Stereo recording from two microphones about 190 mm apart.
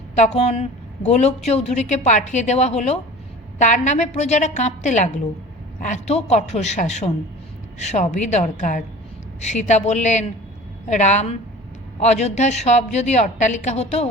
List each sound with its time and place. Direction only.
0.2 s a woman's voice: 35° left (ahead or behind)